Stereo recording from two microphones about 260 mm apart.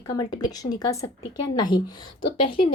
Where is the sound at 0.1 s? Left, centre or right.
Centre.